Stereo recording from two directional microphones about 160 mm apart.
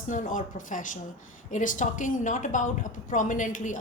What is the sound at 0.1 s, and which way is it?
A woman's voice, 55° left (ahead or behind).